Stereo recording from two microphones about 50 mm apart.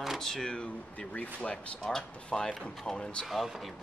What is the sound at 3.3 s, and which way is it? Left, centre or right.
Speech, centre.